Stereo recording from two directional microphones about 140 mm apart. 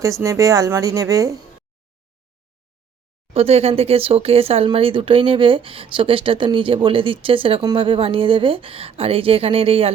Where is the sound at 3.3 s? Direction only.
45° right (ahead or behind).